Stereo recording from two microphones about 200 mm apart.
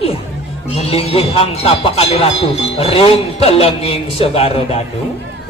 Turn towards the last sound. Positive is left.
turn(degrees=30)  # may be behind; listen again after turning